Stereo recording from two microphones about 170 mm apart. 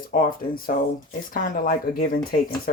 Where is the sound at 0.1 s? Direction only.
55° left (ahead or behind).